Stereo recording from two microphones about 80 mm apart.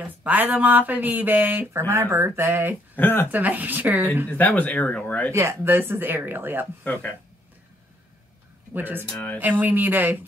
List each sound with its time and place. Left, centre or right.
0.0 s speech: right
3.0 s speech: left
3.3 s speech: right
4.3 s speech: centre
5.3 s speech: right
6.8 s speech: centre
8.7 s speech: right